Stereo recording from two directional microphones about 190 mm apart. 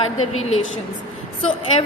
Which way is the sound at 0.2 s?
90° left.